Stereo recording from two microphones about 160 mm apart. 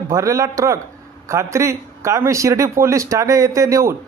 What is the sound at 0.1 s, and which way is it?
Speech, 20° right (ahead or behind).